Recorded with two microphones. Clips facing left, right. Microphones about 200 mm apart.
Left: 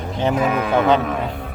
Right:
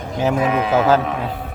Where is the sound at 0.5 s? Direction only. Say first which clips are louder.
Right 2 dB; 50° left (ahead or behind).